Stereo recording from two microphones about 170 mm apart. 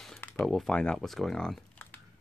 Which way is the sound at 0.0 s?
5° left (ahead or behind).